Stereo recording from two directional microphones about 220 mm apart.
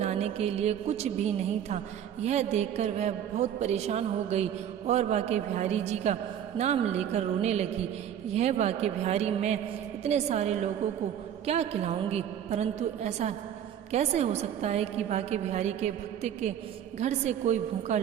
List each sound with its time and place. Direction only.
0.0 s a woman's voice: 30° right (ahead or behind)